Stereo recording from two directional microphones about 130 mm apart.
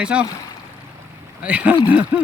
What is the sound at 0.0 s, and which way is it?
Speech, 10° right (ahead or behind).